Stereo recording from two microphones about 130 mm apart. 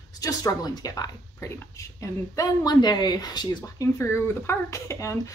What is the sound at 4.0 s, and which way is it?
A woman's voice, 20° left (ahead or behind).